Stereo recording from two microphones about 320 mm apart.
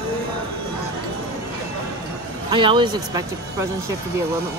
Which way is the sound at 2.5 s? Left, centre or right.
Centre.